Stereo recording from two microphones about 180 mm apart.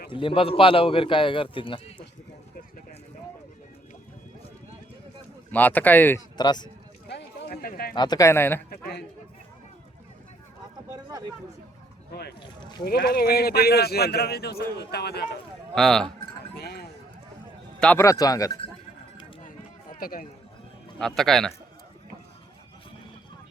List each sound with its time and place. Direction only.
0.1 s a man's voice: 30° left (ahead or behind)
5.5 s speech: 10° left (ahead or behind)
6.3 s a man's voice: 25° left (ahead or behind)
7.4 s speech: 55° left (ahead or behind)
7.9 s speech: 25° left (ahead or behind)
8.7 s speech: 65° left (ahead or behind)
12.1 s speech: 65° left (ahead or behind)
15.7 s a man's voice: centre (ahead or behind)
16.6 s clip-clop: 65° left (ahead or behind)
17.7 s a man's voice: 5° left (ahead or behind)
18.0 s a man's voice: 20° left (ahead or behind)
19.4 s run: 50° left (ahead or behind)
21.0 s a man's voice: 5° left (ahead or behind)